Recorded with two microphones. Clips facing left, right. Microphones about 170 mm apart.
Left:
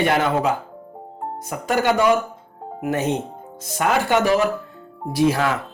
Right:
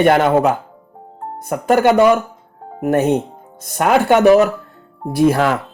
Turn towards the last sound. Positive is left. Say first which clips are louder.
# right 5 dB
turn(degrees=-60)  # may be behind; listen again after turning